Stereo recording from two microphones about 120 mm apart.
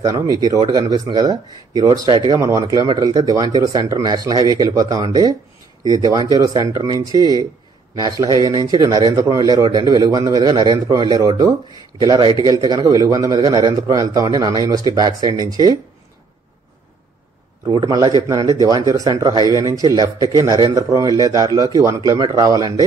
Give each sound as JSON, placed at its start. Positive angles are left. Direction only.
{"t": 0.4, "sound": "a man's voice", "side_deg": -35}
{"t": 17.6, "sound": "a man's voice", "side_deg": -30}